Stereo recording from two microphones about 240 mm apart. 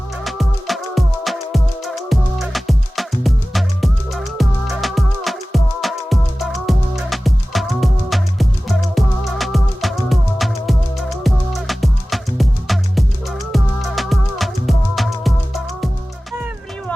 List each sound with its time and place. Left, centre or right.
0.3 s music: centre